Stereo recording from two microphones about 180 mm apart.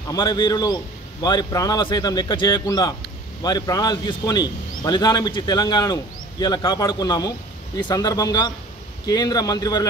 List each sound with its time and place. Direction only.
0.1 s speech: 25° left (ahead or behind)